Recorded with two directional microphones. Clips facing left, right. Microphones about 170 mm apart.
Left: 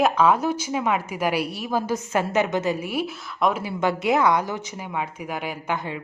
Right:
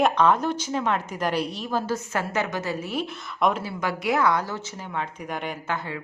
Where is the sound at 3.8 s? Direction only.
25° left (ahead or behind).